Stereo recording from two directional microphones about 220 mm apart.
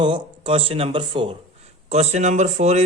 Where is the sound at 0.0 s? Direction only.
25° right (ahead or behind).